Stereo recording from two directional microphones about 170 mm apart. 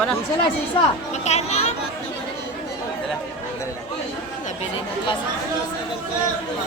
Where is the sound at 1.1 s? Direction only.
40° left (ahead or behind).